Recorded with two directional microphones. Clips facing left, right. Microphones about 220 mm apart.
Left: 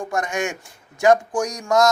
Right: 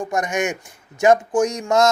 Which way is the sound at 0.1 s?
20° right (ahead or behind).